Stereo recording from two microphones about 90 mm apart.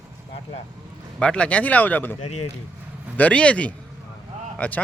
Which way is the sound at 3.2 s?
15° left (ahead or behind).